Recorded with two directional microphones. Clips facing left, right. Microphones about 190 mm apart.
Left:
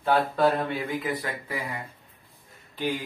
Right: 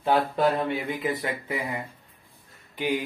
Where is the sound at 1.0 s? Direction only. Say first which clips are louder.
Right 2 dB; 25° right (ahead or behind).